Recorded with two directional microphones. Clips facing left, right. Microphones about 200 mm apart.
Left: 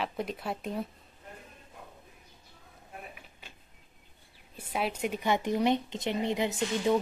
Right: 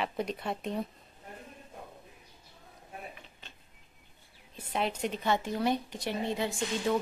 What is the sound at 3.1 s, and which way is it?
Drawer open or close, 10° left (ahead or behind).